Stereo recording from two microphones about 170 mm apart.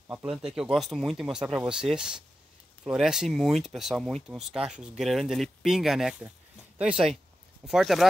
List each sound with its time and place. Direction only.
0.1 s speech: 5° right (ahead or behind)